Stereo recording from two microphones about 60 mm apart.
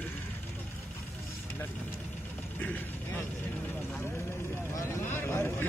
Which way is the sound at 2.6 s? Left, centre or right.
Left.